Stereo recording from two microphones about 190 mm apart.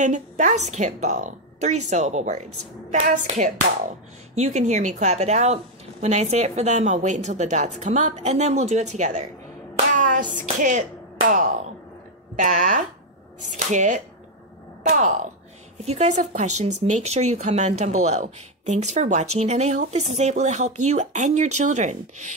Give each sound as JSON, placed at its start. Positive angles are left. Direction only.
{"t": 0.0, "sound": "a woman's voice", "side_deg": -40}